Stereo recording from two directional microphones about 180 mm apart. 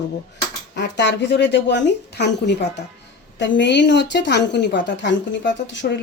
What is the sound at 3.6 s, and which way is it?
Speech, 80° left.